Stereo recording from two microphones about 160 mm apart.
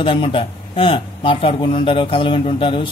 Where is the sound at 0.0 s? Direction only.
30° left (ahead or behind).